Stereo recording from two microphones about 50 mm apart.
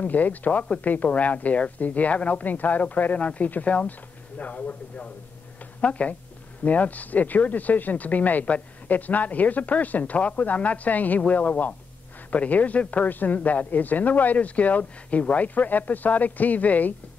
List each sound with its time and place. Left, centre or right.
0.0 s speech: left